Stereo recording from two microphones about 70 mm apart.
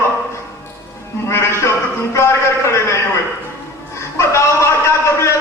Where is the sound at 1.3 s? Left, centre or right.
Left.